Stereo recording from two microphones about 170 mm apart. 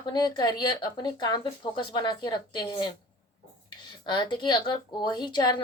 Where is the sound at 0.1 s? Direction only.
25° left (ahead or behind).